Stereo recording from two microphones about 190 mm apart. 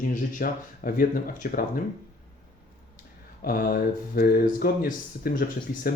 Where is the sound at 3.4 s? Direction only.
50° left (ahead or behind).